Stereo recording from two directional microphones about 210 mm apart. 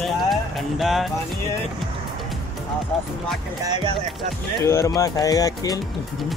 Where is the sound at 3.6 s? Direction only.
20° right (ahead or behind).